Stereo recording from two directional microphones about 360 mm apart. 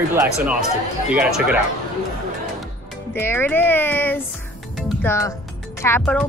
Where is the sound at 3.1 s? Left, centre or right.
Centre.